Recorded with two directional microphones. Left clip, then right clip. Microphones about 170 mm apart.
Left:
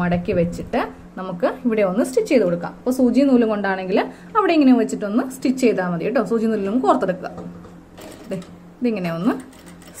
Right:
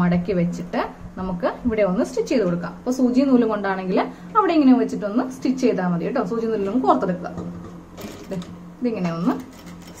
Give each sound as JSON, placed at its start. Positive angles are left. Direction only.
{"t": 0.0, "sound": "a woman's voice", "side_deg": 35}
{"t": 8.8, "sound": "a woman's voice", "side_deg": 35}